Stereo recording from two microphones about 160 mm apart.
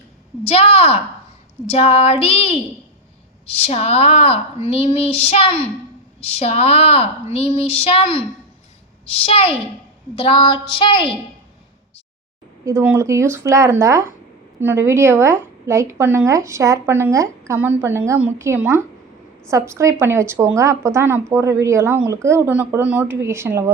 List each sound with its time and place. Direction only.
0.4 s a woman's voice: 40° left (ahead or behind)
9.2 s a woman's voice: 35° left (ahead or behind)
12.6 s a woman's voice: 15° right (ahead or behind)